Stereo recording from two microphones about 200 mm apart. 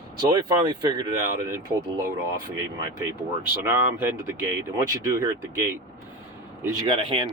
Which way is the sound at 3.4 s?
10° right (ahead or behind).